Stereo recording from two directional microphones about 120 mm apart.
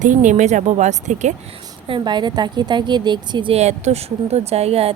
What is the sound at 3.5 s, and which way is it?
Speech, 65° right (ahead or behind).